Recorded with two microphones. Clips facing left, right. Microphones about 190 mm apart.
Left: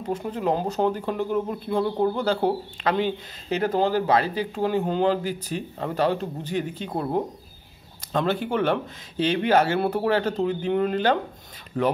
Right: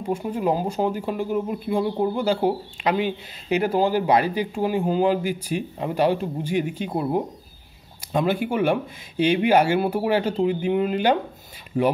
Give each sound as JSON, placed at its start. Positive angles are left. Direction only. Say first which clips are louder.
{"t": 0.0, "sound": "speech", "louder": "right 2 dB", "side_deg": -10}